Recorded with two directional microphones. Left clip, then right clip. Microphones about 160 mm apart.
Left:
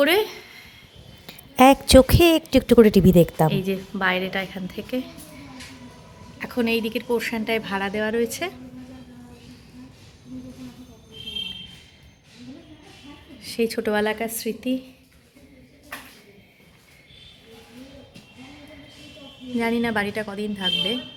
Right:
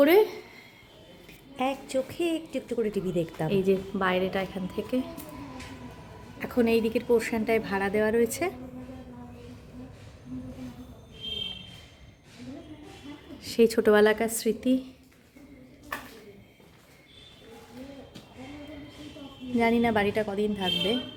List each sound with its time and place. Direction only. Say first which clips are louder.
0.0 s a woman's voice: left 1 dB; 5° right (ahead or behind)
1.3 s a woman's voice: left 15 dB; 90° left; by 3.3 s 65° left (ahead or behind)
3.5 s a woman's voice: right 2 dB; 5° right (ahead or behind)
6.4 s a woman's voice: left 1 dB; 5° right (ahead or behind)
13.4 s a woman's voice: right 2 dB; 25° right (ahead or behind)
19.5 s a woman's voice: left 1 dB; 10° right (ahead or behind)